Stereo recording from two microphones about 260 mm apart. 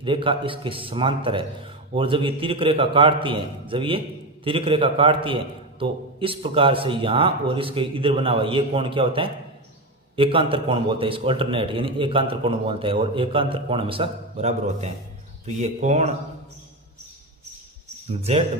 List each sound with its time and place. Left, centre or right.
0.0 s a man's voice: centre
18.2 s a man's voice: right